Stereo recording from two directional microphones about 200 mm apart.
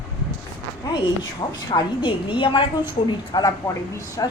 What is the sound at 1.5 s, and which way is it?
A woman's voice, 20° left (ahead or behind).